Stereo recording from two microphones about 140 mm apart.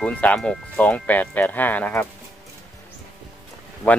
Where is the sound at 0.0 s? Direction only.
10° left (ahead or behind).